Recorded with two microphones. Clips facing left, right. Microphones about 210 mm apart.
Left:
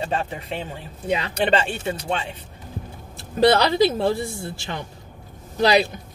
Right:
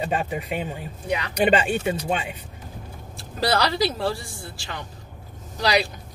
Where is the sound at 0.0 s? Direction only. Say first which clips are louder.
Right 1 dB; 10° right (ahead or behind).